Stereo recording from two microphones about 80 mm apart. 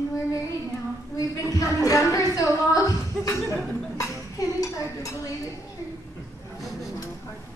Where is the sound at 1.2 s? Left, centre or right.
Left.